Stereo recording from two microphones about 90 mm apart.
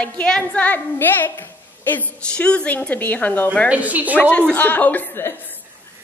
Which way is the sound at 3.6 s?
15° right (ahead or behind).